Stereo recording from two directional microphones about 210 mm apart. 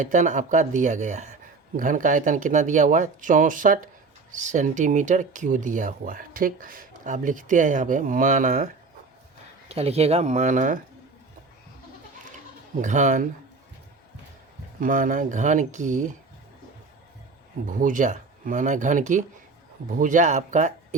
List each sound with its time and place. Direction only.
0.0 s speech: 35° right (ahead or behind)
12.8 s speech: 35° right (ahead or behind)
14.8 s speech: 40° right (ahead or behind)
17.7 s speech: 40° right (ahead or behind)